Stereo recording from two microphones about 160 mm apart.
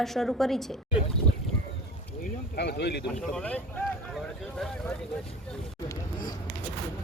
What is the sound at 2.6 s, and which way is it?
Speech, 90° left.